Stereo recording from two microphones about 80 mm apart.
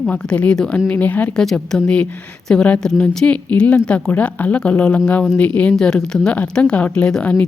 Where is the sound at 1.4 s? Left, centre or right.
Centre.